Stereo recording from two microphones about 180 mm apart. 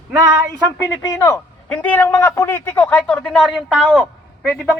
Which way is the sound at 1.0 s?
15° left (ahead or behind).